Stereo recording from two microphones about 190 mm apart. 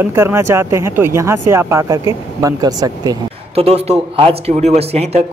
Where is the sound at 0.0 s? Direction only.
15° right (ahead or behind).